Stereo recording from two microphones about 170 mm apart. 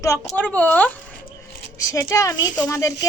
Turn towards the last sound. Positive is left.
turn(degrees=20)  # may be behind; listen again after turning